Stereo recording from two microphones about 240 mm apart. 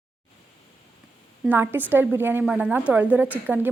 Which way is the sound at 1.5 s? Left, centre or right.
Centre.